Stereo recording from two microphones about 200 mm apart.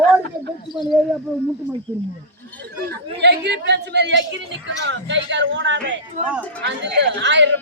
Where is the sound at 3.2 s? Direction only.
60° right (ahead or behind).